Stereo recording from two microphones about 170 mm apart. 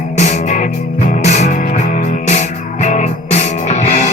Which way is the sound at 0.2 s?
45° left (ahead or behind).